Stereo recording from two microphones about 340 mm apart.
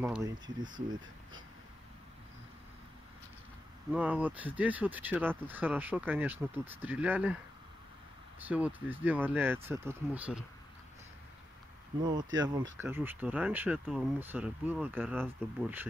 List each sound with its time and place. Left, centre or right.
0.0 s speech: centre
3.9 s speech: centre
8.5 s speech: centre
12.0 s speech: centre